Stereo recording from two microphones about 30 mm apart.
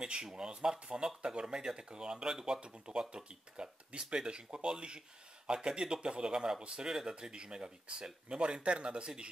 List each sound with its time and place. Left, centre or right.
0.0 s speech: right
2.6 s speech: right
6.9 s speech: centre
7.2 s speech: right